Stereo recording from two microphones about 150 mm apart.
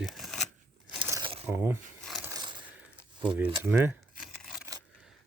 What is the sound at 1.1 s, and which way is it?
Crumpling, 35° right (ahead or behind).